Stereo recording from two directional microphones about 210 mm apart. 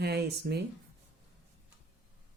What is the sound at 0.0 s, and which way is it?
Speech, 50° right (ahead or behind).